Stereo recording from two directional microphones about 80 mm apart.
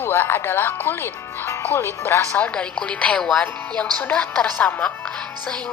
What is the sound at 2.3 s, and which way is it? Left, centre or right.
Speech, centre.